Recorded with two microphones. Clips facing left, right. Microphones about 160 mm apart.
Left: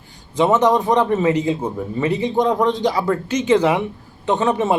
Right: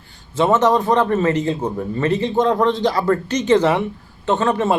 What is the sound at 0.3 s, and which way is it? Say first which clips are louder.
A man's voice: even; 15° left (ahead or behind).